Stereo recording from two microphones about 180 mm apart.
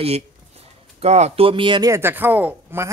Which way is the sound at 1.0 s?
35° right (ahead or behind).